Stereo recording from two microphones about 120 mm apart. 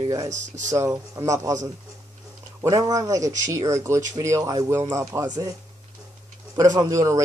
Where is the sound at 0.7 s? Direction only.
25° right (ahead or behind).